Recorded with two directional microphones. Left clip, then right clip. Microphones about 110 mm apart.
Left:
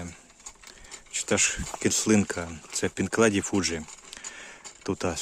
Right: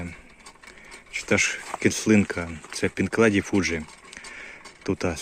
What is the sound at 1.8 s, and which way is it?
Speech, 20° left (ahead or behind).